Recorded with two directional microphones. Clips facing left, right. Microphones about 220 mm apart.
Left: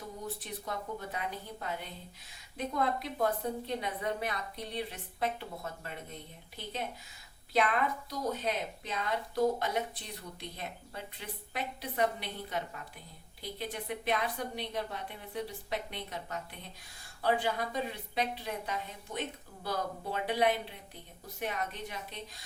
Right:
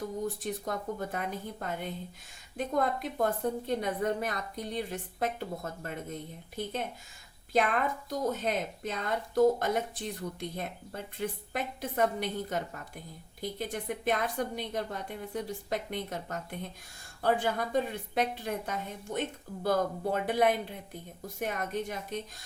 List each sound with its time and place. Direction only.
0.4 s speech: 45° right (ahead or behind)
7.5 s speech: 45° right (ahead or behind)